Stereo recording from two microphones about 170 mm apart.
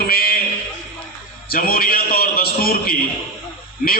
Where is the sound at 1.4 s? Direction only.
60° left (ahead or behind).